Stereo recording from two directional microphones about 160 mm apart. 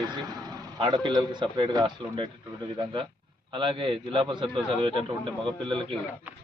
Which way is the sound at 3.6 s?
30° right (ahead or behind).